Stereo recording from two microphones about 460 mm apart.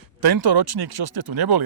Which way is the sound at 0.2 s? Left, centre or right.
Right.